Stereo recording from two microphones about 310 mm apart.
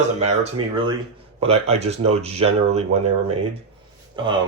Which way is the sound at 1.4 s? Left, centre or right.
Centre.